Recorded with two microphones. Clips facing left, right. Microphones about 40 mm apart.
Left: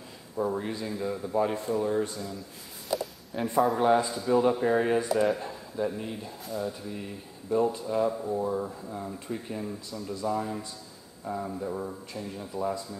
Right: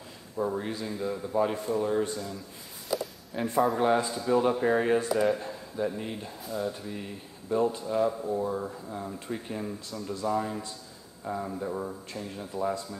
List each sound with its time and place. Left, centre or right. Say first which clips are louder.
0.4 s a man's voice: left 1 dB; centre
6.0 s speech: even; centre